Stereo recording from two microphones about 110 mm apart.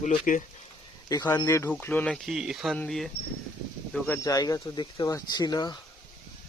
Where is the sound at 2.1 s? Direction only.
5° right (ahead or behind).